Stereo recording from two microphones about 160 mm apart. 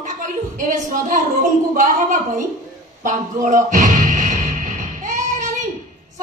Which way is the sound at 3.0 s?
50° right (ahead or behind).